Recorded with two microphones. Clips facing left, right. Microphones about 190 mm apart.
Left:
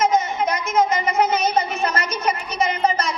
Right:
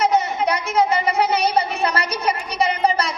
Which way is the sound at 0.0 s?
35° right (ahead or behind).